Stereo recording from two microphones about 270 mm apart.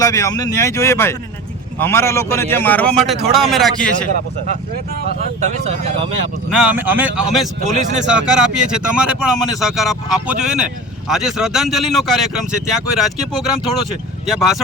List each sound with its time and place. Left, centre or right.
0.0 s speech: centre
5.4 s speech: right
6.5 s speech: centre
7.6 s speech: right
8.0 s speech: centre